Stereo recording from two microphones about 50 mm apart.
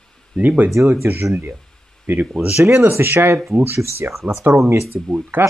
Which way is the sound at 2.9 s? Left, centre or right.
Right.